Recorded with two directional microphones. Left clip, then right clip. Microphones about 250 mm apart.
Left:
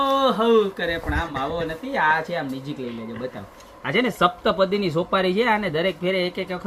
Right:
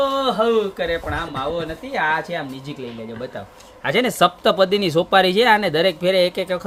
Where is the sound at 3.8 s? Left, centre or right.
Right.